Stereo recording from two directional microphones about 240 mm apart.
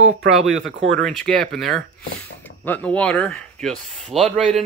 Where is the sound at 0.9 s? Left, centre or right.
Centre.